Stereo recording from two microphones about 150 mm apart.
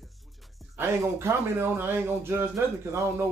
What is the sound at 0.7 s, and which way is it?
Speech, 15° right (ahead or behind).